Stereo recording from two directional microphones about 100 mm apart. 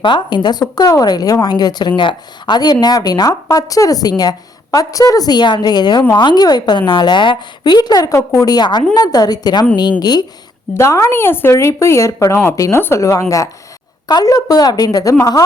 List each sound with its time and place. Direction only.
0.0 s a woman's voice: 50° left (ahead or behind)
10.8 s speech: 30° left (ahead or behind)